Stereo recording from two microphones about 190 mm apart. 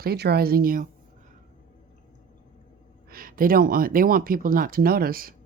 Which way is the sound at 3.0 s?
50° right (ahead or behind).